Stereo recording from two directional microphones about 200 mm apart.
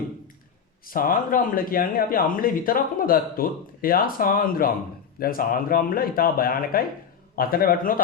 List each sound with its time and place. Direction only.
0.9 s a man's voice: 45° left (ahead or behind)